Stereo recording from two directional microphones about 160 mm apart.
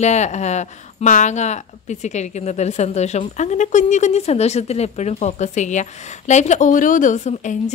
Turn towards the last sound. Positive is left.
turn(degrees=50)  # may be behind; listen again after turning